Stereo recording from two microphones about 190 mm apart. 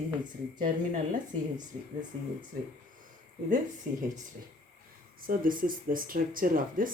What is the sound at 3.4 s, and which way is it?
Speech, 40° right (ahead or behind).